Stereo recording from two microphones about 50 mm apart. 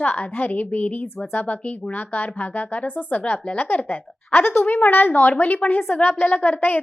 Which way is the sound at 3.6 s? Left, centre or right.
Left.